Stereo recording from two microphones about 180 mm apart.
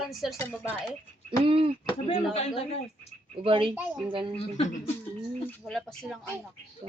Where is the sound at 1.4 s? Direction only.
30° right (ahead or behind).